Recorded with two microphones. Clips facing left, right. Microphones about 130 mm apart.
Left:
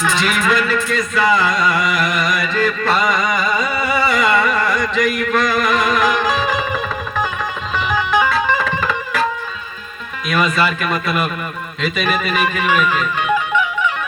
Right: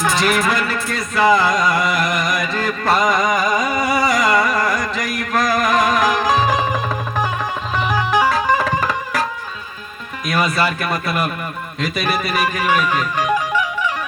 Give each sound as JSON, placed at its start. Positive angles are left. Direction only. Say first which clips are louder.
{"t": 0.0, "sound": "speech", "louder": "right 1 dB", "side_deg": -40}
{"t": 2.5, "sound": "music", "louder": "left 1 dB", "side_deg": -40}
{"t": 3.4, "sound": "a sound", "louder": "right 1 dB", "side_deg": -15}
{"t": 3.8, "sound": "a sound", "louder": "even", "side_deg": -40}
{"t": 7.9, "sound": "music", "louder": "even", "side_deg": -35}
{"t": 10.2, "sound": "speech", "louder": "left 1 dB", "side_deg": -35}